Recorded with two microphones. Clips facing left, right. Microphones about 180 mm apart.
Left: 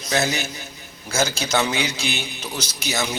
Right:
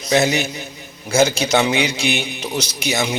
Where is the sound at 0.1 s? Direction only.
15° right (ahead or behind).